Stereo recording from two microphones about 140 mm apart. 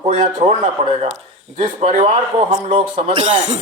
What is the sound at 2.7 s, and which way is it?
Speech, 40° right (ahead or behind).